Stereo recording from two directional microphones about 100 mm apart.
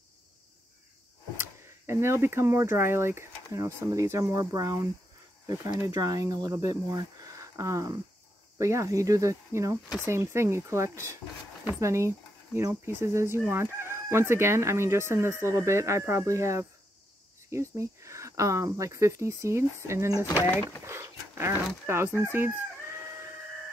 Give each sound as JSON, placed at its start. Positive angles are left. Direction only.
{"t": 1.4, "sound": "speech", "side_deg": -25}
{"t": 5.9, "sound": "speech", "side_deg": -40}
{"t": 10.0, "sound": "chicken", "side_deg": -25}
{"t": 17.5, "sound": "speech", "side_deg": -30}
{"t": 20.8, "sound": "dog", "side_deg": -25}
{"t": 21.8, "sound": "chicken", "side_deg": -25}